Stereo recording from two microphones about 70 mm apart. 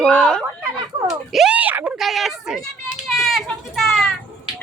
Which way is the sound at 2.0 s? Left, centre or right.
Centre.